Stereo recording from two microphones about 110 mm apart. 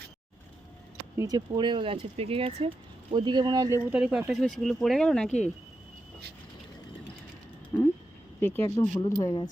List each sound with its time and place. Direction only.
1.1 s speech: 30° right (ahead or behind)
1.5 s speech: 50° right (ahead or behind)
3.1 s speech: 45° right (ahead or behind)
3.8 s speech: 10° right (ahead or behind)
4.3 s speech: centre (ahead or behind)
7.7 s speech: 25° left (ahead or behind)